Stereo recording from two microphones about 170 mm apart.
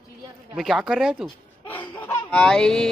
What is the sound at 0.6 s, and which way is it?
Speech, centre (ahead or behind).